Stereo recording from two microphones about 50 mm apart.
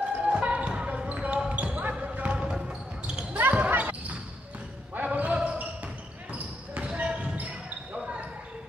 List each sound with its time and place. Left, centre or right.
0.2 s basketball bounce: right
3.3 s basketball bounce: right
7.9 s basketball bounce: centre